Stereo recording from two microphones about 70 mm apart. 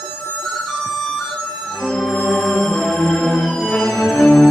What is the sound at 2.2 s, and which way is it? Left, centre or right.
Music, centre.